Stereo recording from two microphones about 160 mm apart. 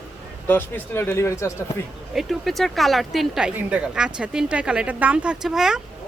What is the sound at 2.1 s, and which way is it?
Speech, centre (ahead or behind).